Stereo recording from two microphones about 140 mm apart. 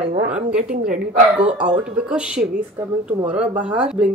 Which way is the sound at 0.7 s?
85° right.